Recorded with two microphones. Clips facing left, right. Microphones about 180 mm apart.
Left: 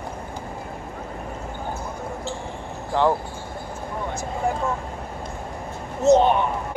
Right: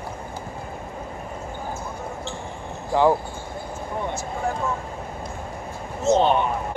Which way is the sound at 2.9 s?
5° right (ahead or behind).